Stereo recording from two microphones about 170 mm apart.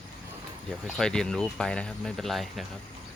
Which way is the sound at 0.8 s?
Centre (ahead or behind).